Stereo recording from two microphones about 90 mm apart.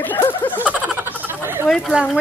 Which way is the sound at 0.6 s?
15° right (ahead or behind).